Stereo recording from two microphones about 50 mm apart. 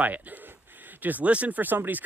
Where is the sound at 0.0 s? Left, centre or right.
Right.